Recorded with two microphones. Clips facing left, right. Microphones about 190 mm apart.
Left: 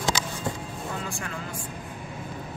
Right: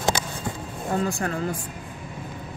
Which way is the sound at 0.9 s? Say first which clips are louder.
Right 12 dB; 40° right (ahead or behind).